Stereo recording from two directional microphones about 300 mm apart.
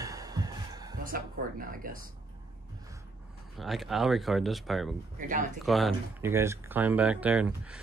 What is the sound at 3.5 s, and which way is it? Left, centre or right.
Speech, centre.